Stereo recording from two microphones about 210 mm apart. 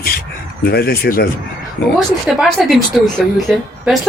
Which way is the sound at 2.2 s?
Centre (ahead or behind).